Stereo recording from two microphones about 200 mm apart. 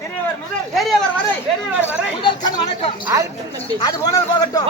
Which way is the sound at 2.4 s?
30° left (ahead or behind).